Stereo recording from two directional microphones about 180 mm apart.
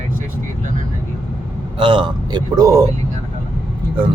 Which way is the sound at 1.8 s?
30° right (ahead or behind).